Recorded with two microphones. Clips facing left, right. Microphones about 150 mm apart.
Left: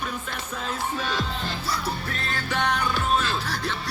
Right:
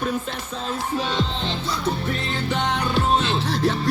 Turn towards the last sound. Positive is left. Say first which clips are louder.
# right 7 dB
turn(degrees=-30)  # may be behind; listen again after turning